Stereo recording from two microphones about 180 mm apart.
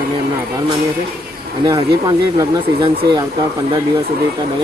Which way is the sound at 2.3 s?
25° right (ahead or behind).